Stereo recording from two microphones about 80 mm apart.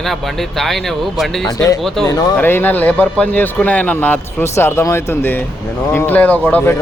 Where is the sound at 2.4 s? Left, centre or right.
Left.